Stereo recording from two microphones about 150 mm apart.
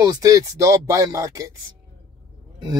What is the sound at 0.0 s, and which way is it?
Speech, 20° right (ahead or behind).